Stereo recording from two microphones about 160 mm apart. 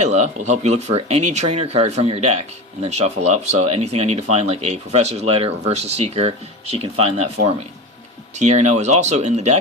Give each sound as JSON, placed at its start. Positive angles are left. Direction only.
{"t": 0.0, "sound": "speech", "side_deg": -45}
{"t": 8.4, "sound": "speech", "side_deg": -45}